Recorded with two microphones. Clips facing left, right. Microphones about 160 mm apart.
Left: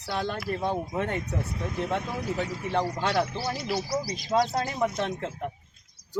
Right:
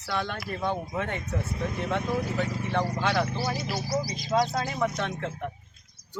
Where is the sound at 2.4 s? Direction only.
35° left (ahead or behind).